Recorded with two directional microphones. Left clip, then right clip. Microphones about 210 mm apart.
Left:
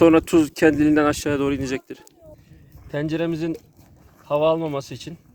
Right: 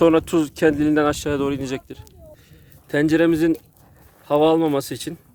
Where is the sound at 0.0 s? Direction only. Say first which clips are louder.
Left 1 dB; 10° left (ahead or behind).